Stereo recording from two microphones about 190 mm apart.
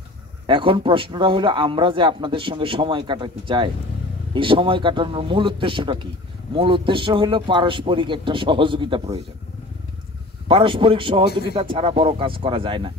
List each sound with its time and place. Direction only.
0.5 s speech: 25° right (ahead or behind)
10.5 s speech: 25° right (ahead or behind)